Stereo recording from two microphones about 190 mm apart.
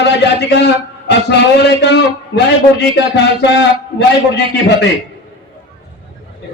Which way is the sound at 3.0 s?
65° left (ahead or behind).